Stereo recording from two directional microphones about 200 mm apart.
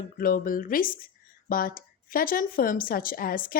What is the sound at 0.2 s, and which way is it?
Speech, 45° left (ahead or behind).